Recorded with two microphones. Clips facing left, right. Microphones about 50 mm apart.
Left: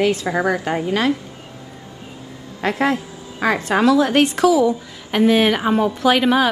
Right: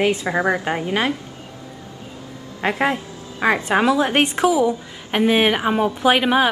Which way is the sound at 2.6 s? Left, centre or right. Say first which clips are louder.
Left 1 dB; centre.